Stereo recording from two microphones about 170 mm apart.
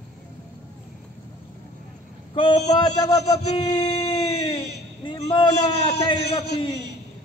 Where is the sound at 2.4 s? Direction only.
30° left (ahead or behind).